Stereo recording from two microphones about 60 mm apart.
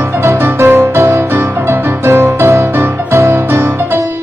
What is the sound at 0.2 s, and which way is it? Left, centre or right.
Music, right.